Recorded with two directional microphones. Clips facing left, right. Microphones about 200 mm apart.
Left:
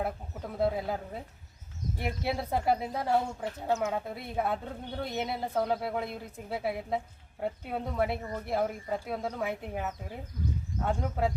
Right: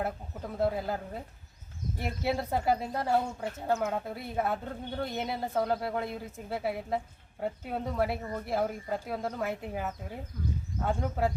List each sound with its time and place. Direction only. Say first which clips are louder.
0.0 s speech: even; centre (ahead or behind)